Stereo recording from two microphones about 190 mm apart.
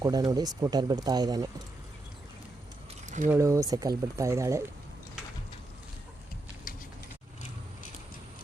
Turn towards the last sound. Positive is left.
turn(degrees=45)  # may be behind; listen again after turning